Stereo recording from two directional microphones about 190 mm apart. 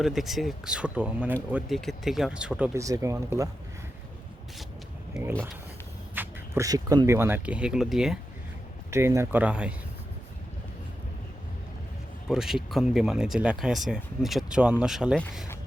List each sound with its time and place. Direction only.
0.0 s speech: centre (ahead or behind)
2.7 s speech: 15° right (ahead or behind)
5.2 s a sound: centre (ahead or behind)
6.1 s speech: 15° right (ahead or behind)
8.9 s speech: 15° right (ahead or behind)
12.3 s speech: centre (ahead or behind)